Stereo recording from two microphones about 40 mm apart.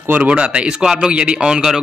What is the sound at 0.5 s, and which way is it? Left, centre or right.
Speech, centre.